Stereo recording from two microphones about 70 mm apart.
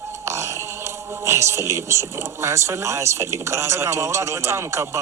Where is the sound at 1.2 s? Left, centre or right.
Right.